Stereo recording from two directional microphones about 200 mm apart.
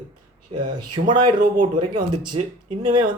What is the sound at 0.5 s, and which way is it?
Speech, 20° right (ahead or behind).